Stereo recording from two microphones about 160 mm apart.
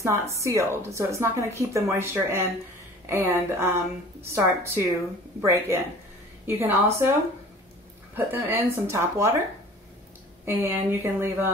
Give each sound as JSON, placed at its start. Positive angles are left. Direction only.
{"t": 0.0, "sound": "a woman's voice", "side_deg": -20}
{"t": 8.3, "sound": "a woman's voice", "side_deg": -10}
{"t": 10.4, "sound": "a woman's voice", "side_deg": -15}